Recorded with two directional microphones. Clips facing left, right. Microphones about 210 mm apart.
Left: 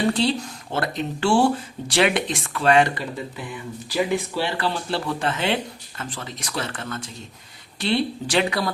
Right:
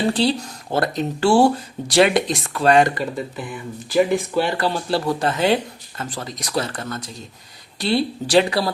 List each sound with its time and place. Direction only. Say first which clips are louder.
0.0 s speech: right 2 dB; 35° right (ahead or behind)